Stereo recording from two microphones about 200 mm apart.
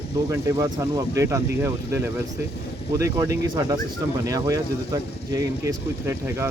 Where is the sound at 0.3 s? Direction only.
15° right (ahead or behind).